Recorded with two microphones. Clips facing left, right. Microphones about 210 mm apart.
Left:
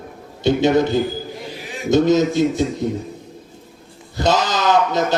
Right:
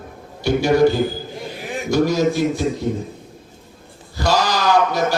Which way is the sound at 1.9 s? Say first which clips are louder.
Left 3 dB; 20° left (ahead or behind).